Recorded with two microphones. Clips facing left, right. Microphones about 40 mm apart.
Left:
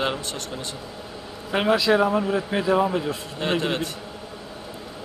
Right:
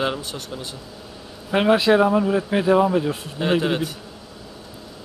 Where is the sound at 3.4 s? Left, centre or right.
Centre.